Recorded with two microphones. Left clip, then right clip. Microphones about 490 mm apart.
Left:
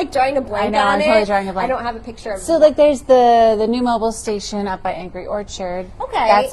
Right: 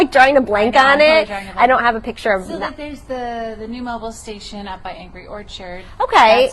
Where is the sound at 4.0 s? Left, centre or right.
Left.